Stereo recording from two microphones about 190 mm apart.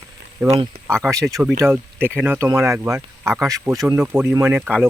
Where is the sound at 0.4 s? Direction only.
5° right (ahead or behind).